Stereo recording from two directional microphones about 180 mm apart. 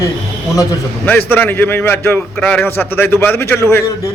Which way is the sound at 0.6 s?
10° left (ahead or behind).